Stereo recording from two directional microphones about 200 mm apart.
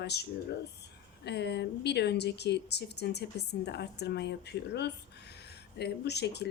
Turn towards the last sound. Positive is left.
turn(degrees=55)  # may be behind; listen again after turning